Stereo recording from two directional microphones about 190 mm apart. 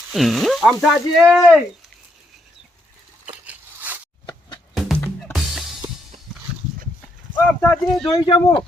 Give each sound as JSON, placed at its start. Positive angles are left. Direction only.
{"t": 0.1, "sound": "speech", "side_deg": 0}
{"t": 3.4, "sound": "a sound", "side_deg": -10}
{"t": 4.3, "sound": "music", "side_deg": 25}
{"t": 4.7, "sound": "music", "side_deg": 0}
{"t": 7.3, "sound": "speech", "side_deg": 10}